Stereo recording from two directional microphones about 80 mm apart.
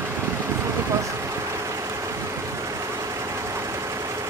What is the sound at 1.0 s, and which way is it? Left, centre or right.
Vehicle, right.